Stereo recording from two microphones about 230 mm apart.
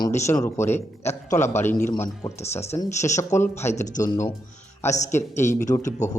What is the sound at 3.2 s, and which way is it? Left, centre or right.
A man's voice, centre.